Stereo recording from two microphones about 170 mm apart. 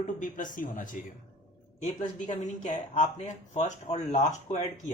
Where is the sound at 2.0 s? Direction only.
40° left (ahead or behind).